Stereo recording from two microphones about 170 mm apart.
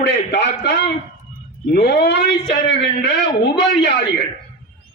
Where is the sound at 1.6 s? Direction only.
70° left (ahead or behind); by 4.2 s 90° left.